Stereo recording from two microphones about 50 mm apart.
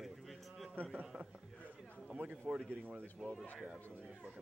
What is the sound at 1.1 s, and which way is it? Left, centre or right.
A man's voice, right.